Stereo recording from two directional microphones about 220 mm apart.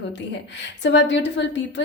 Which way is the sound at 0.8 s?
55° left (ahead or behind).